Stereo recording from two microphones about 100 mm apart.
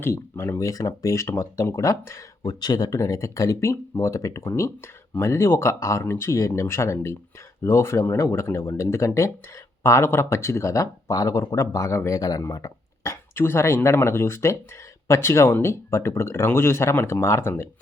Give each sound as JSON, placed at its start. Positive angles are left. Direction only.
{"t": 0.0, "sound": "speech", "side_deg": 25}
{"t": 2.5, "sound": "speech", "side_deg": 45}